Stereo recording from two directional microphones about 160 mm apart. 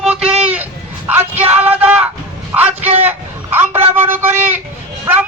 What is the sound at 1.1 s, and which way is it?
Music, 10° right (ahead or behind).